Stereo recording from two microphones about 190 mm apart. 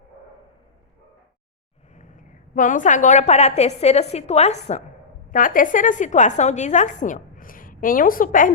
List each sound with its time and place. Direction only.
2.0 s a woman's voice: 40° left (ahead or behind)